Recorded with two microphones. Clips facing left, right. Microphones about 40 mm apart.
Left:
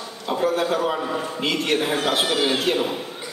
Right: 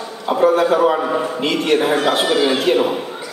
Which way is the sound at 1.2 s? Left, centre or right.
Centre.